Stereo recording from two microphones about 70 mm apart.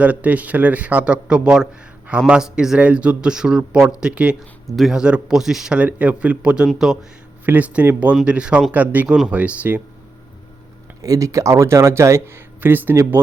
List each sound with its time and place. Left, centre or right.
0.0 s a man's voice: right
4.4 s speech: centre
4.9 s speech: centre
7.4 s a man's voice: right
9.0 s speech: centre
9.3 s a man's voice: right
11.0 s speech: right
12.5 s a man's voice: right